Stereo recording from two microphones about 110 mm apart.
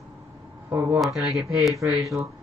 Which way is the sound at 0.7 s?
20° right (ahead or behind).